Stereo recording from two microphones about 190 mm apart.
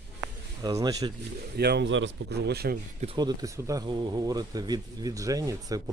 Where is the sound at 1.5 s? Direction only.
60° right (ahead or behind).